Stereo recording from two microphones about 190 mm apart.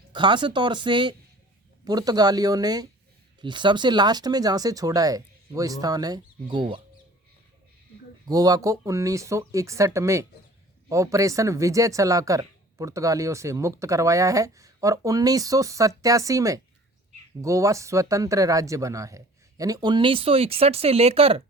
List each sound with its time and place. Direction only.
0.1 s speech: 25° right (ahead or behind)
8.3 s speech: 20° right (ahead or behind)